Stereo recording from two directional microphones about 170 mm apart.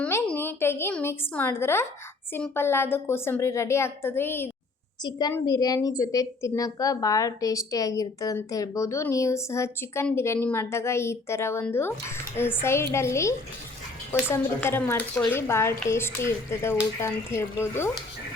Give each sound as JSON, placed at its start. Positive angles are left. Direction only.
{"t": 0.0, "sound": "a woman's voice", "side_deg": 10}